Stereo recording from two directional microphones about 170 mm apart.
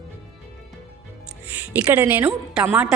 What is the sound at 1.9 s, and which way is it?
Speech, 10° right (ahead or behind).